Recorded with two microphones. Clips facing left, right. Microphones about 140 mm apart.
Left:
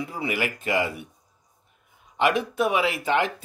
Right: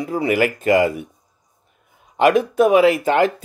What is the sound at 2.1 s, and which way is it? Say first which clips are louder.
Speech: right 8 dB; 45° right (ahead or behind).